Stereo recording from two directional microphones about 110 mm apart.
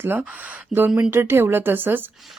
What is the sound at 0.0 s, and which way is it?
Speech, 15° right (ahead or behind).